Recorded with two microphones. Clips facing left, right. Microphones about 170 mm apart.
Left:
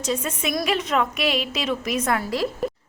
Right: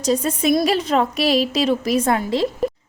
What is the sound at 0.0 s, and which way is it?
A woman's voice, 35° right (ahead or behind).